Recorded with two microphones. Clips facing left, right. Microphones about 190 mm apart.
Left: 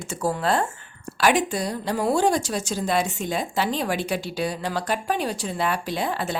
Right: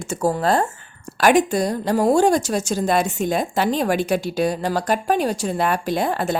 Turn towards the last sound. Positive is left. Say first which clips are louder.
# right 5 dB
turn(degrees=-50)  # may be behind; listen again after turning